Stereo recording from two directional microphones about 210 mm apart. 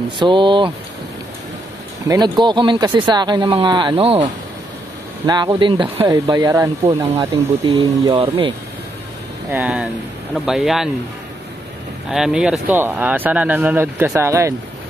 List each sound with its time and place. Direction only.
0.2 s speech: 20° right (ahead or behind)
2.0 s speech: 20° right (ahead or behind)
6.9 s speech: 25° right (ahead or behind)
9.5 s speech: 5° right (ahead or behind)
12.1 s speech: 5° right (ahead or behind)